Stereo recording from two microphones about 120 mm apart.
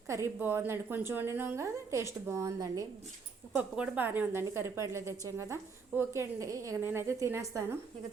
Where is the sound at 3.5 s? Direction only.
15° right (ahead or behind).